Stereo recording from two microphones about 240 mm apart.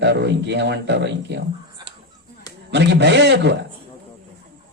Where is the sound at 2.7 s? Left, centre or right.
Right.